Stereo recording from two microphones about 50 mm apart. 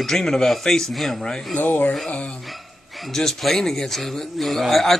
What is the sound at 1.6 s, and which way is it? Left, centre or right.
Speech, left.